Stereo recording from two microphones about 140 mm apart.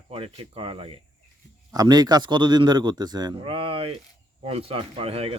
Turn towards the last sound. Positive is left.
turn(degrees=-45)  # may be behind; listen again after turning